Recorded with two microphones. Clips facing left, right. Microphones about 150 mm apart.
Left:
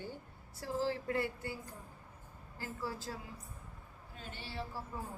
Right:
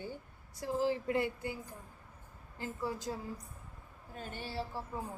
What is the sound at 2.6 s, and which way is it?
Speech, 20° right (ahead or behind).